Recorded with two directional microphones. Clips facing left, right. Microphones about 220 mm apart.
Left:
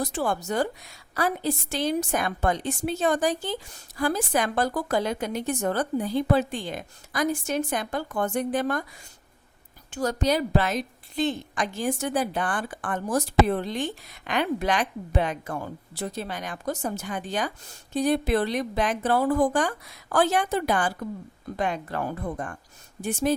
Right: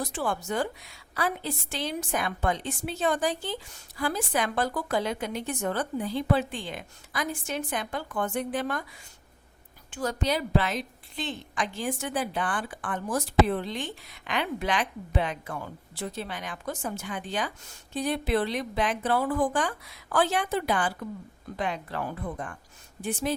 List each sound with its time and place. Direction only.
0.0 s a woman's voice: 40° left (ahead or behind)
9.9 s a woman's voice: 40° left (ahead or behind)